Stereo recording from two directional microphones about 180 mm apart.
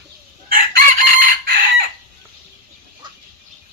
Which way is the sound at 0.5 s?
50° right (ahead or behind).